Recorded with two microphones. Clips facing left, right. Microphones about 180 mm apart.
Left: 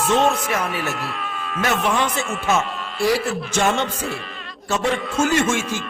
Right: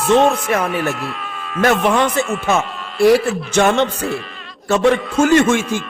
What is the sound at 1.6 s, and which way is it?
Music, 60° right (ahead or behind).